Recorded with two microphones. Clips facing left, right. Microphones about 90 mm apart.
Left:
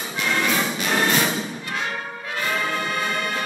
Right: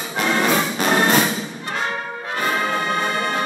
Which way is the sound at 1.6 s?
35° right (ahead or behind).